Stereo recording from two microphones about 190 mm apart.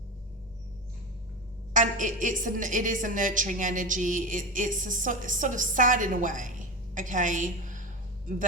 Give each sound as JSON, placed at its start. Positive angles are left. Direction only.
{"t": 1.7, "sound": "a woman's voice", "side_deg": -40}